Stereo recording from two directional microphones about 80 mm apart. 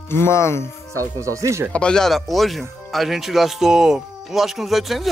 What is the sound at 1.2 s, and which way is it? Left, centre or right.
Speech, right.